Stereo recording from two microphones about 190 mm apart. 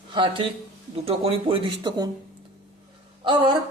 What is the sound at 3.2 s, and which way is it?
Speech, 25° right (ahead or behind).